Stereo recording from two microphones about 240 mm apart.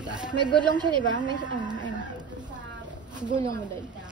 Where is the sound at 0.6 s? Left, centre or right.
Centre.